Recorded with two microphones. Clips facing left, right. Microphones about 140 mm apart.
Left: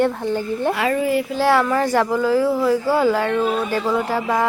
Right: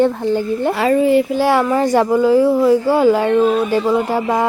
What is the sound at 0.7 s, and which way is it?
Speech, 30° right (ahead or behind).